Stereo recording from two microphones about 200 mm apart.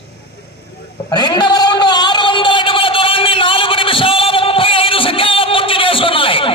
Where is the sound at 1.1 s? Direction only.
20° left (ahead or behind).